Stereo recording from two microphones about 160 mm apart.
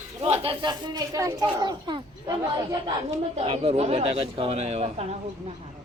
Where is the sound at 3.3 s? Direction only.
40° right (ahead or behind).